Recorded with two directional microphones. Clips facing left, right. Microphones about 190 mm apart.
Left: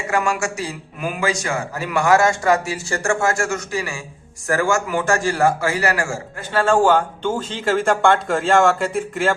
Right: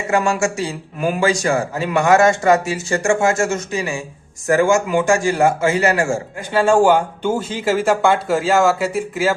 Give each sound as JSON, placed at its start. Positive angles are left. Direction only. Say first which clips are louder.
{"t": 0.1, "sound": "a man's voice", "louder": "right 4 dB", "side_deg": -25}
{"t": 6.6, "sound": "speech", "louder": "right 2 dB", "side_deg": -10}